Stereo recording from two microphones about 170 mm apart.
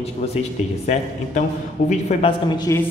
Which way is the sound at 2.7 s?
15° left (ahead or behind).